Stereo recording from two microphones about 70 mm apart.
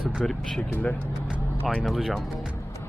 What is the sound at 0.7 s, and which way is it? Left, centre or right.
Speech, centre.